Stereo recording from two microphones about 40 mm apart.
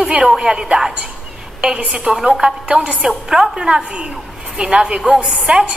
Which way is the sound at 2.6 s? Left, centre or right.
Right.